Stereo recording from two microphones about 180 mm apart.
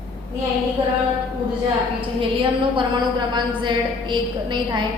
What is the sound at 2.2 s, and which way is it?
A woman's voice, 30° right (ahead or behind).